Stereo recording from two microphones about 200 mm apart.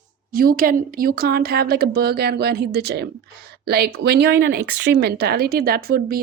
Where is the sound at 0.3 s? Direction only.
45° right (ahead or behind).